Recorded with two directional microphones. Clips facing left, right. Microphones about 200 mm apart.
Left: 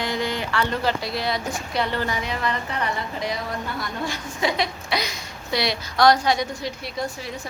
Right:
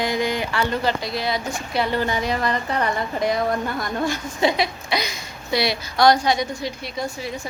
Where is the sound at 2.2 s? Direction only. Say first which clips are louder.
Right 4 dB; 40° right (ahead or behind).